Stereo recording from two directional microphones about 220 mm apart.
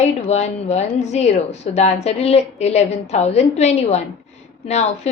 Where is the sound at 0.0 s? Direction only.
30° left (ahead or behind).